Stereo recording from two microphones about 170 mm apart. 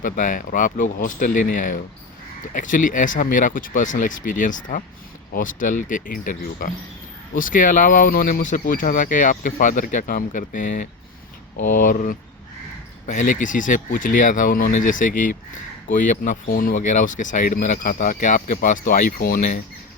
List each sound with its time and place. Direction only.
0.0 s speech: 50° left (ahead or behind)